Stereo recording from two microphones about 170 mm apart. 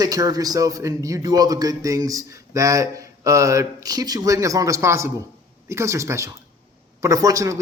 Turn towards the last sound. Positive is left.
turn(degrees=-20)  # may be behind; listen again after turning